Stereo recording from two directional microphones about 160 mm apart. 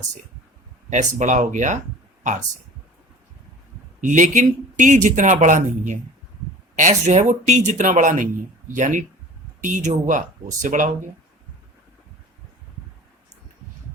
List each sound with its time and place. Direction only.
0.9 s speech: 50° right (ahead or behind)
4.0 s speech: 50° right (ahead or behind)